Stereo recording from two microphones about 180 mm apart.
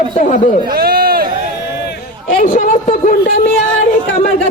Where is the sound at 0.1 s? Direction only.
45° left (ahead or behind).